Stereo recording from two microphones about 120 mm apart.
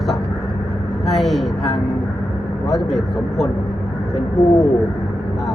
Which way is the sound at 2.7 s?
Centre (ahead or behind).